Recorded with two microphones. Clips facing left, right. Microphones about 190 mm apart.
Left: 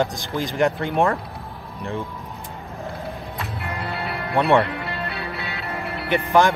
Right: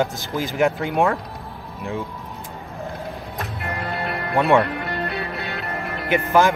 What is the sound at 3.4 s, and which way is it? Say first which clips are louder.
Music: right 3 dB; 55° right (ahead or behind).